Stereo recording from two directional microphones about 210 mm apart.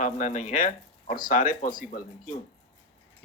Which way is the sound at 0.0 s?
35° left (ahead or behind).